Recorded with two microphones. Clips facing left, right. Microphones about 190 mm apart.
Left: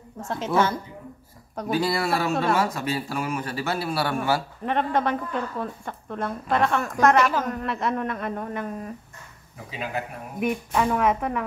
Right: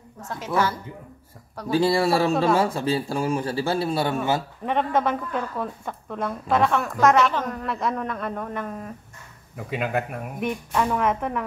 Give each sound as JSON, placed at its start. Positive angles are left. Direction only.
{"t": 0.2, "sound": "speech", "side_deg": 25}
{"t": 1.7, "sound": "a man's voice", "side_deg": -30}
{"t": 4.6, "sound": "a woman's voice", "side_deg": 0}
{"t": 9.7, "sound": "a man's voice", "side_deg": -55}
{"t": 10.4, "sound": "a woman's voice", "side_deg": 5}